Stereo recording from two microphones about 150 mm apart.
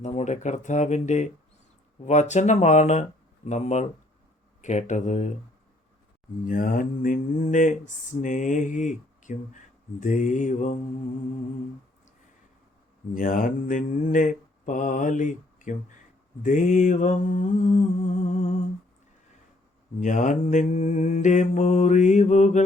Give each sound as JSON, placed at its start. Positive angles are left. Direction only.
{"t": 0.0, "sound": "mantra", "side_deg": 50}
{"t": 6.4, "sound": "mantra", "side_deg": 65}
{"t": 13.1, "sound": "mantra", "side_deg": 65}
{"t": 20.0, "sound": "mantra", "side_deg": 55}